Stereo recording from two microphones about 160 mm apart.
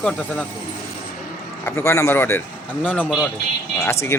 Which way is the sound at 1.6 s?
15° left (ahead or behind).